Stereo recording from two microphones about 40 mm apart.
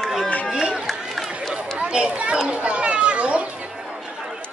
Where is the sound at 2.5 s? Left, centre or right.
Right.